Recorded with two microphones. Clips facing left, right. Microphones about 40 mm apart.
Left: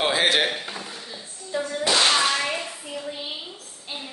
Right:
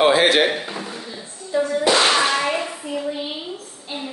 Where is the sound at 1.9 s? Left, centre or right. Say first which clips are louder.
Right 2 dB; right.